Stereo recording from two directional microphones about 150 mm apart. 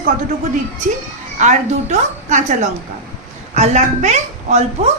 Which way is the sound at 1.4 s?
50° right (ahead or behind).